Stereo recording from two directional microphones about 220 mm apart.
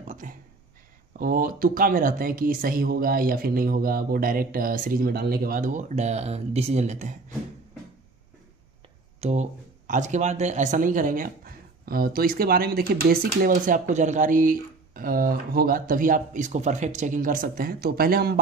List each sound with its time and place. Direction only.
0.0 s a sound: 35° right (ahead or behind)
1.1 s speech: 40° right (ahead or behind)
9.2 s speech: 30° right (ahead or behind)